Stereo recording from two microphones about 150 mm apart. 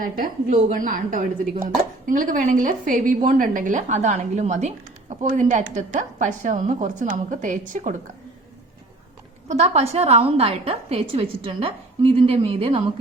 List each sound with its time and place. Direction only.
0.0 s speech: 65° right (ahead or behind)
9.5 s a woman's voice: 45° right (ahead or behind)